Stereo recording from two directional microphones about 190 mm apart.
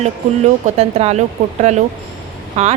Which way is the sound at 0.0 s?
35° right (ahead or behind).